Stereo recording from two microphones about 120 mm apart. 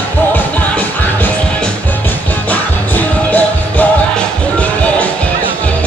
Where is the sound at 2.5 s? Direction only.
15° left (ahead or behind).